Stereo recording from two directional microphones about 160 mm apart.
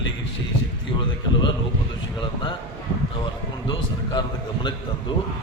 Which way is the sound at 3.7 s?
30° left (ahead or behind).